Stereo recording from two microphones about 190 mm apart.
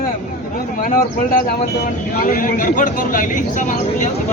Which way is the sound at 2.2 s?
45° left (ahead or behind).